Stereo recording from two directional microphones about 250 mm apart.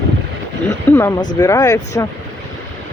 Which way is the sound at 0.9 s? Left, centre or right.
Centre.